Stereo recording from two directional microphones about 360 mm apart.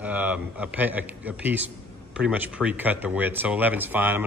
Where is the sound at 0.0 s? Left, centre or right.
Centre.